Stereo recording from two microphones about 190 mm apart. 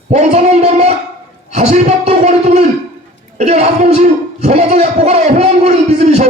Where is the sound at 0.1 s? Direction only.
35° right (ahead or behind).